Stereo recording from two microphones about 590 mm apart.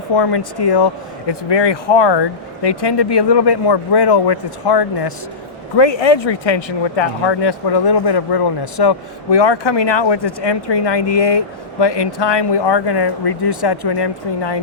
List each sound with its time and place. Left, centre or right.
0.2 s speech: left